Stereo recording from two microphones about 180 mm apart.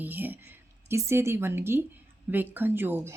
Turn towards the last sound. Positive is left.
turn(degrees=-10)  # may be behind; listen again after turning